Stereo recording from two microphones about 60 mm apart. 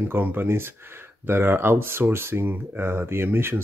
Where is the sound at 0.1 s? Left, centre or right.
Right.